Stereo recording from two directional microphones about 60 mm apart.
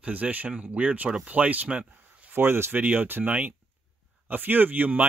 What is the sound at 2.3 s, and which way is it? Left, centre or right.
Speech, right.